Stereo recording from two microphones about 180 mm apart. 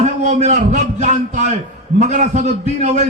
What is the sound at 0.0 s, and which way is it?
A man's voice, 40° right (ahead or behind).